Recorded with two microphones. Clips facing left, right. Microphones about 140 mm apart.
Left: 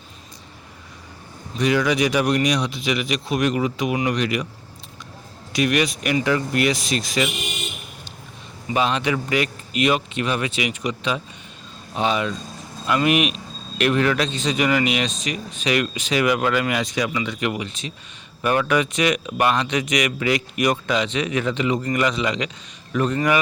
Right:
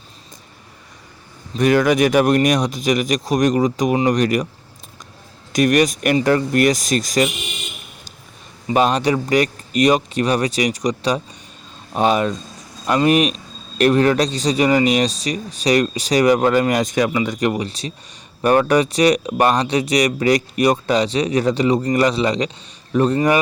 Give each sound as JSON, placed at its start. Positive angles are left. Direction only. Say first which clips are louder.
{"t": 1.5, "sound": "speech", "louder": "right 5 dB", "side_deg": -50}
{"t": 5.5, "sound": "speech", "louder": "right 5 dB", "side_deg": -45}
{"t": 8.7, "sound": "a man's voice", "louder": "right 5 dB", "side_deg": -45}